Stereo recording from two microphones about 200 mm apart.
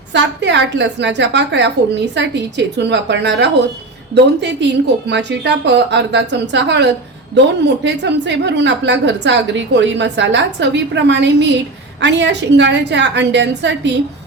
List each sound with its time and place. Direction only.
0.1 s a woman's voice: 60° right (ahead or behind)